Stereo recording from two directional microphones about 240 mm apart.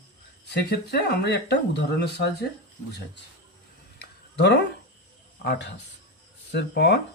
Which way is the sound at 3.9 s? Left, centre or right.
Left.